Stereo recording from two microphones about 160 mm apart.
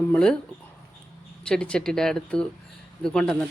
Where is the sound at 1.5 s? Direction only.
5° left (ahead or behind).